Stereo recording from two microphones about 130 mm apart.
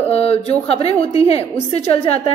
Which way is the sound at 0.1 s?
50° left (ahead or behind).